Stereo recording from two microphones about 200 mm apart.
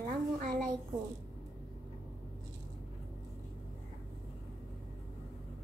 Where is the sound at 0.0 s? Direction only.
40° right (ahead or behind).